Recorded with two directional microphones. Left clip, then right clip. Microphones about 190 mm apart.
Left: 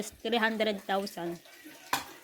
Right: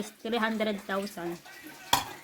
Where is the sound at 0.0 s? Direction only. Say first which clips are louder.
Left 1 dB; 25° left (ahead or behind).